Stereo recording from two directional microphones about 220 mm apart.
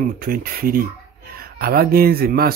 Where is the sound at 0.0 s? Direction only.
40° right (ahead or behind).